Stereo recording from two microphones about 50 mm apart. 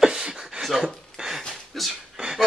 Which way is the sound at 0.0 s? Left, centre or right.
Centre.